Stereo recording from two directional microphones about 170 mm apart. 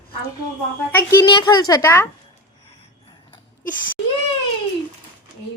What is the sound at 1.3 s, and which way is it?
Speech, 25° left (ahead or behind).